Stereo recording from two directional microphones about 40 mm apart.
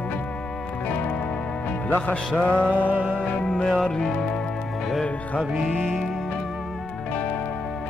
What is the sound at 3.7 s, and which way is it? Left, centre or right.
Music, centre.